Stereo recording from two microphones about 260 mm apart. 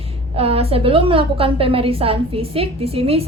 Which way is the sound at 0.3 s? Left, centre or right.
Right.